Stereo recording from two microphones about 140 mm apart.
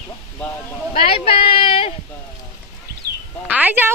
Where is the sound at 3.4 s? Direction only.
10° right (ahead or behind).